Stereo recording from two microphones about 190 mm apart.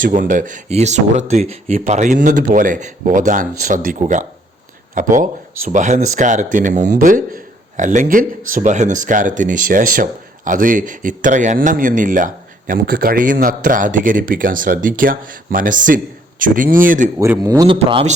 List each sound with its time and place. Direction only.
0.0 s speech: 45° right (ahead or behind)
17.2 s speech: 15° right (ahead or behind)